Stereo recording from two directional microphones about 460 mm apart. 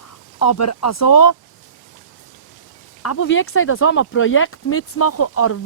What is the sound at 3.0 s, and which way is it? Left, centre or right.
Speech, left.